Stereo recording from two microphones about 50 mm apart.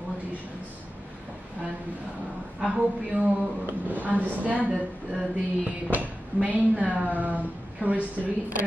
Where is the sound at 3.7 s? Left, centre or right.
Right.